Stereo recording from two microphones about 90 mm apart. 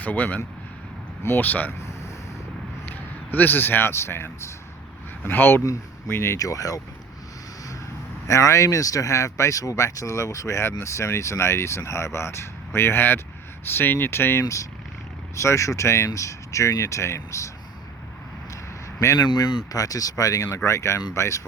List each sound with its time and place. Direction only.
0.0 s speech: 15° left (ahead or behind)
2.8 s a man's voice: 20° left (ahead or behind); by 6.8 s 40° left (ahead or behind)
8.3 s speech: 35° left (ahead or behind)
14.4 s speech: 40° left (ahead or behind)
18.9 s speech: 30° left (ahead or behind)
19.2 s speech: 50° left (ahead or behind)
19.7 s speech: 40° left (ahead or behind)